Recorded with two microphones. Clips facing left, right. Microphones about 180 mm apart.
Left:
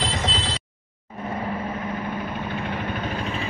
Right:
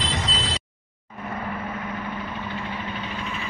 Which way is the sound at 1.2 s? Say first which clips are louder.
Left 3 dB; 25° left (ahead or behind).